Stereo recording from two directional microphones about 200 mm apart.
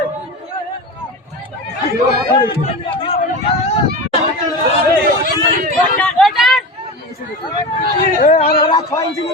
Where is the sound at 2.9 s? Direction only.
25° left (ahead or behind).